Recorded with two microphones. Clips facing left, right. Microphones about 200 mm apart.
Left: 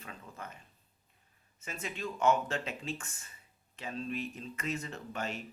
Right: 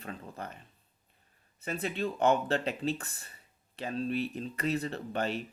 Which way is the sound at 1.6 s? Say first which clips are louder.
Right 7 dB; 35° right (ahead or behind).